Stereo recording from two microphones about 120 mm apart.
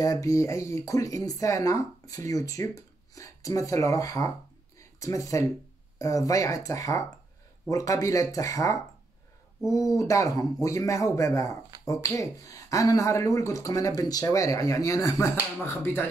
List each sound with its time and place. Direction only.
0.0 s speech: 30° left (ahead or behind)